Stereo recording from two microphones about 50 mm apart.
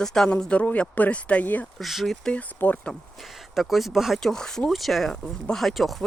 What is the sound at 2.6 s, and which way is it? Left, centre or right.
Speech, left.